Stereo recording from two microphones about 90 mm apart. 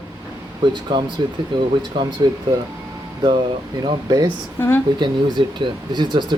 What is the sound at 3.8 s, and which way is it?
Speech, 55° right (ahead or behind).